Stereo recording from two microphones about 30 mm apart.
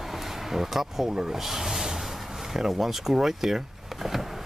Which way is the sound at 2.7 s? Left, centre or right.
Centre.